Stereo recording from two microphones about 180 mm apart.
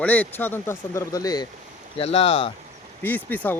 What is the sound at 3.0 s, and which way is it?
Speech, 10° left (ahead or behind).